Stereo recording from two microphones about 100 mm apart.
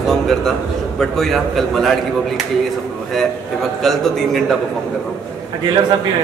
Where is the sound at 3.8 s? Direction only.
5° left (ahead or behind).